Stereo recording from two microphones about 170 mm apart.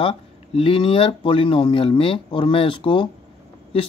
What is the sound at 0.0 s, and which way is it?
Speech, 35° left (ahead or behind).